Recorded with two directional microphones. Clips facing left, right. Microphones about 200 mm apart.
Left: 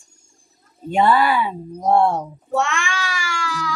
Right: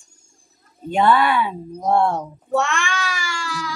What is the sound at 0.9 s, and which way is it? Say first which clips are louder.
Speech: even; 5° left (ahead or behind).